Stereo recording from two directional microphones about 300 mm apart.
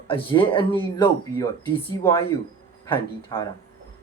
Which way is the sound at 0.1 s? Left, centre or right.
Centre.